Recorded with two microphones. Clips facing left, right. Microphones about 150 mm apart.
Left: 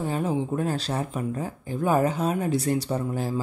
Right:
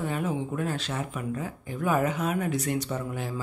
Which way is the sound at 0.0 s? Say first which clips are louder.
Left 3 dB; 30° left (ahead or behind).